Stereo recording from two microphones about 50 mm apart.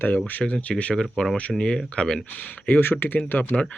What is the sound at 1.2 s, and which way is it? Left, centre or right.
Speech, centre.